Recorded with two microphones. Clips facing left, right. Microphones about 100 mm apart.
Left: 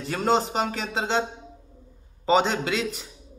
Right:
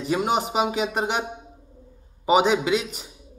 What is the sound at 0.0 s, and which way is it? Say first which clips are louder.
A man's voice: even; 15° right (ahead or behind).